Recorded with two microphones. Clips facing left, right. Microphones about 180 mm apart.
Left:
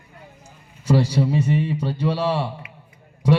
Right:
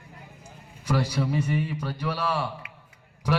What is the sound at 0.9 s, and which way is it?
A man's voice, 30° left (ahead or behind).